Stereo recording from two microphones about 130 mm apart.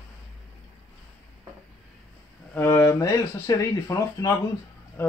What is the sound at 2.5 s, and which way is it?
Speech, 20° left (ahead or behind).